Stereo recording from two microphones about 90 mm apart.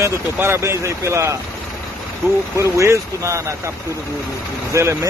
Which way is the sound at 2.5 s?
35° right (ahead or behind).